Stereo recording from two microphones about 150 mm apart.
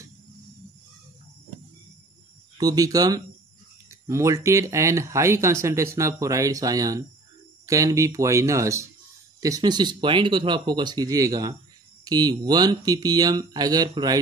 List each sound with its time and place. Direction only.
2.5 s speech: 25° right (ahead or behind)